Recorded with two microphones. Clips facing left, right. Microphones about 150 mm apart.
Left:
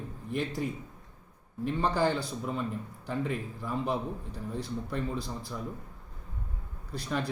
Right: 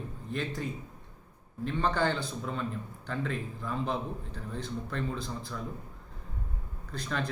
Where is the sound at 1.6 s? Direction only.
10° left (ahead or behind).